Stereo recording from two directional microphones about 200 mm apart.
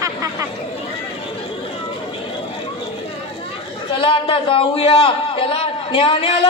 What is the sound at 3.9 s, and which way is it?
A man's voice, 25° left (ahead or behind).